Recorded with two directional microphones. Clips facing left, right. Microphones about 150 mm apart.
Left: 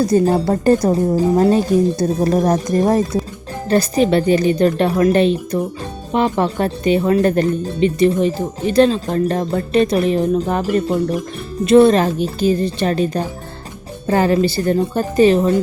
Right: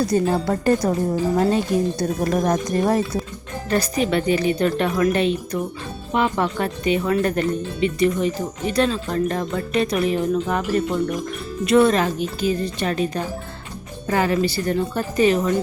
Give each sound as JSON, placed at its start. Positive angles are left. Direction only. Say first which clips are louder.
{"t": 0.1, "sound": "speech", "louder": "left 5 dB", "side_deg": 35}